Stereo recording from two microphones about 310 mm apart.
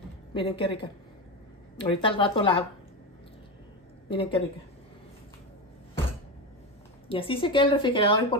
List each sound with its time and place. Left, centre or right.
0.3 s a woman's voice: centre
4.1 s a woman's voice: centre
7.1 s a woman's voice: centre